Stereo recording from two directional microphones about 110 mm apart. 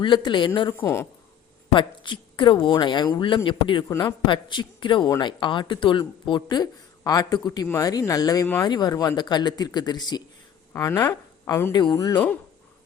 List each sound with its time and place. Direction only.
0.0 s speech: 45° left (ahead or behind)
0.8 s speech: 20° left (ahead or behind)
1.7 s speech: 45° left (ahead or behind)
3.8 s speech: 35° left (ahead or behind)
4.3 s speech: 45° left (ahead or behind)